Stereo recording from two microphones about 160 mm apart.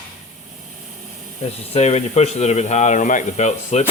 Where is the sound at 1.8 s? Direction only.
45° left (ahead or behind).